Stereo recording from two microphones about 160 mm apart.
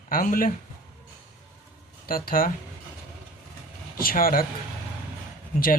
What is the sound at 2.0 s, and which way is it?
Speech, 65° left (ahead or behind).